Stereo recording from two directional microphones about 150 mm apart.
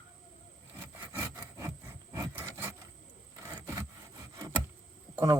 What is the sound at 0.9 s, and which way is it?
Wood, 15° right (ahead or behind).